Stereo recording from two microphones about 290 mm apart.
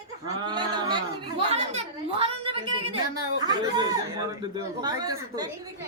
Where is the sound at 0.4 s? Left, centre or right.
Centre.